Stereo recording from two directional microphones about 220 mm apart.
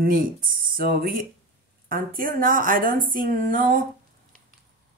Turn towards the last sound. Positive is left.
turn(degrees=-40)  # may be behind; listen again after turning